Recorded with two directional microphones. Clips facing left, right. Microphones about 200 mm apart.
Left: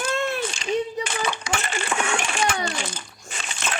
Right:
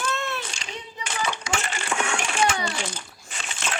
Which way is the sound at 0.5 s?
55° left (ahead or behind).